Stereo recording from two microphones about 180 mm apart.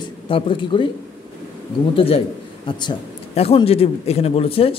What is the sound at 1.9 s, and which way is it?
Speech, 30° left (ahead or behind).